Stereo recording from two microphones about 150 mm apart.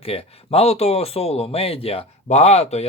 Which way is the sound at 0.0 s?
40° left (ahead or behind).